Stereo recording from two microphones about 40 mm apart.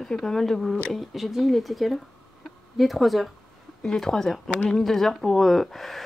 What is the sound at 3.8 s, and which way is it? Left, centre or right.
Speech, centre.